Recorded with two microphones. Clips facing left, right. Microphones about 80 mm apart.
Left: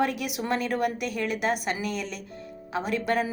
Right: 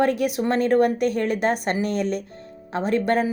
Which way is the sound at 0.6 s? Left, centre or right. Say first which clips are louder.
Right 9 dB; right.